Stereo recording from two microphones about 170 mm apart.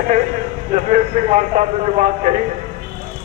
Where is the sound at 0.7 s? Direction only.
45° right (ahead or behind).